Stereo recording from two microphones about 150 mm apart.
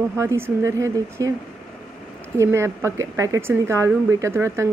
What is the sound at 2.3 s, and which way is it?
Speech, 20° right (ahead or behind).